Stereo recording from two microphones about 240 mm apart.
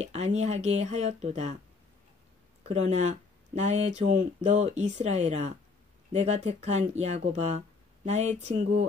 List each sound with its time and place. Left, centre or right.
0.0 s speech: right
2.7 s speech: right